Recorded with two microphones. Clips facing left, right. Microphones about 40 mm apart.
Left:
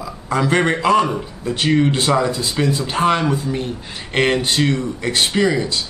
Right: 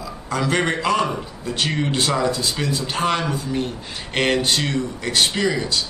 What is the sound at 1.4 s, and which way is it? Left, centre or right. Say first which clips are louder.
Speech: left 7 dB; centre.